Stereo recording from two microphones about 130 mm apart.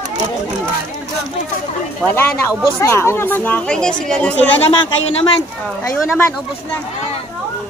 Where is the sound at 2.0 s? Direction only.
20° left (ahead or behind).